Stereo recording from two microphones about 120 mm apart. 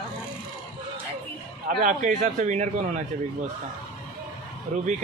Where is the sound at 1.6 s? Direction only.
90° right.